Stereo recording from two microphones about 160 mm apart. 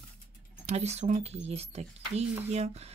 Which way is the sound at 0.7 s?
45° right (ahead or behind).